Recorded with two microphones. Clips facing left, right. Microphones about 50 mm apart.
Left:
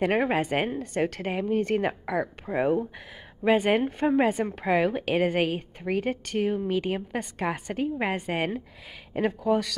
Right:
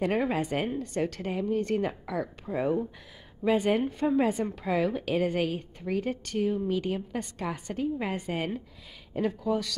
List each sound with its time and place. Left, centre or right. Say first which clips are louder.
0.0 s a woman's voice: left 3 dB; left
3.8 s a woman's voice: left 3 dB; left
6.6 s a woman's voice: left 2 dB; left